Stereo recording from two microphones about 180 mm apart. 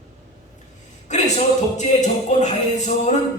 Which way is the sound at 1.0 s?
40° left (ahead or behind).